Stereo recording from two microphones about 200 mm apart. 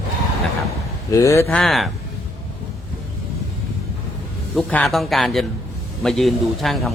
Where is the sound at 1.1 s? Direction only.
15° left (ahead or behind).